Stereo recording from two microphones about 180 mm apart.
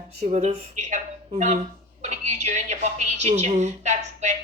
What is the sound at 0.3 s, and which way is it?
A woman's voice, 40° right (ahead or behind).